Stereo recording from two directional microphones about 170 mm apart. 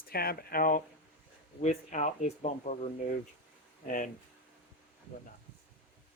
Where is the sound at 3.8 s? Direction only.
50° left (ahead or behind).